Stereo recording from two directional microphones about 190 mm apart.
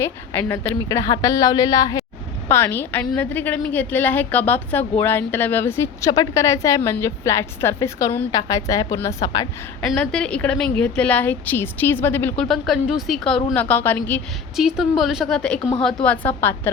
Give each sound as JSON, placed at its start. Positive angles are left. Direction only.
{"t": 0.0, "sound": "a woman's voice", "side_deg": 10}
{"t": 9.9, "sound": "a woman's voice", "side_deg": 5}
{"t": 14.5, "sound": "a woman's voice", "side_deg": 0}